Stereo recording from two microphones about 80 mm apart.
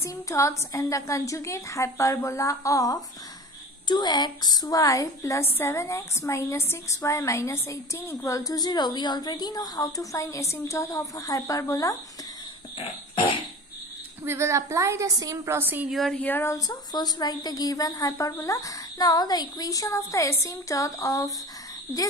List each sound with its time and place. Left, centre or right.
0.0 s a woman's voice: left
3.8 s a woman's voice: left
5.4 s a woman's voice: left
14.2 s a woman's voice: right
15.4 s a woman's voice: right
15.9 s speech: centre
16.2 s speech: left
16.5 s a woman's voice: left